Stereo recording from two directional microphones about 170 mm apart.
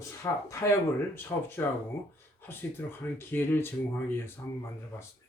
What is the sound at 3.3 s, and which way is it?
Speech, 15° left (ahead or behind).